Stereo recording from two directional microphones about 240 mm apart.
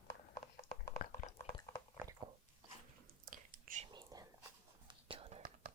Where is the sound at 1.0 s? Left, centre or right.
Left.